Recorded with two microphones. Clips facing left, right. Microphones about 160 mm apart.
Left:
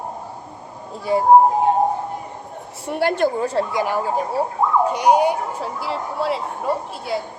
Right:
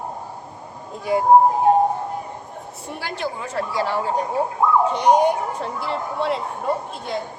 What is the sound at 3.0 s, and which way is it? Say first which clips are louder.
Speech: left 10 dB; 55° left (ahead or behind).